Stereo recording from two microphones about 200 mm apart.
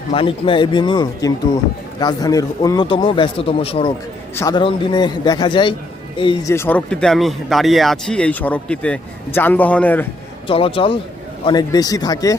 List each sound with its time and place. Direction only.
0.1 s a man's voice: 25° left (ahead or behind)
6.5 s speech: 10° left (ahead or behind)
10.4 s a man's voice: 25° left (ahead or behind)